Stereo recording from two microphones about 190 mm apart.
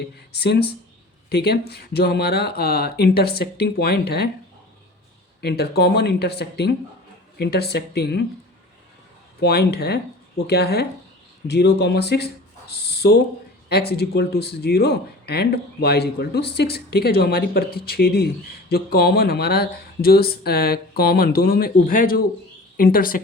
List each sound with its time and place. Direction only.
0.0 s speech: 60° left (ahead or behind)
5.4 s speech: 55° left (ahead or behind)
9.4 s speech: 60° left (ahead or behind)